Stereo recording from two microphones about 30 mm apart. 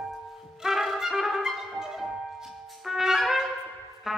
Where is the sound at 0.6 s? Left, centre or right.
Centre.